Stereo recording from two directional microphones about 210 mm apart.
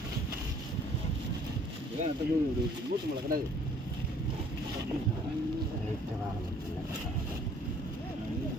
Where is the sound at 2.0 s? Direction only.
35° right (ahead or behind).